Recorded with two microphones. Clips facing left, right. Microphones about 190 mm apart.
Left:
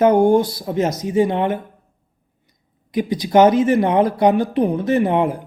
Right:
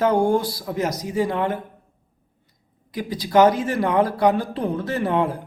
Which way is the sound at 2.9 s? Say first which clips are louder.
Left 4 dB; 20° left (ahead or behind).